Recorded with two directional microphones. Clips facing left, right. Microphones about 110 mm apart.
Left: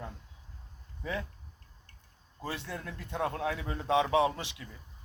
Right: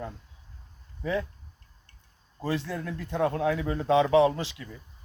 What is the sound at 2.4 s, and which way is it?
A man's voice, 10° left (ahead or behind).